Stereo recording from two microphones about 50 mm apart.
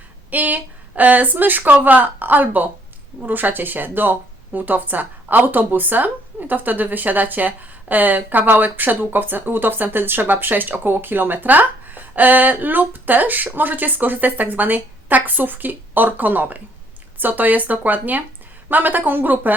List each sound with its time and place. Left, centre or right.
0.3 s speech: right